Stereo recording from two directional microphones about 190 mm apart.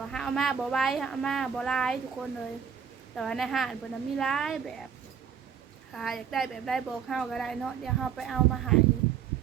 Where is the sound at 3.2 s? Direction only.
Centre (ahead or behind).